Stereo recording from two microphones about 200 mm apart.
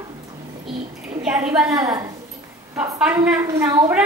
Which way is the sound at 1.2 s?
5° right (ahead or behind).